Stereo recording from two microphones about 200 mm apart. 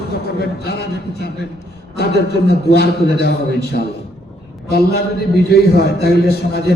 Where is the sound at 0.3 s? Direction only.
55° left (ahead or behind).